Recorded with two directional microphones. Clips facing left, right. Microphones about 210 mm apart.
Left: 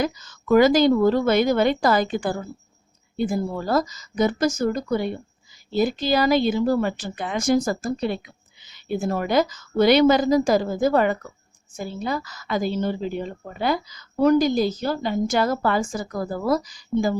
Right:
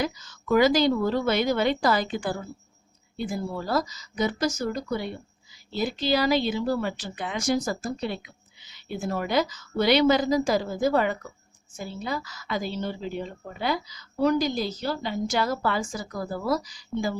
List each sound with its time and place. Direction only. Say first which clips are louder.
0.0 s speech: left 4 dB; 50° left (ahead or behind)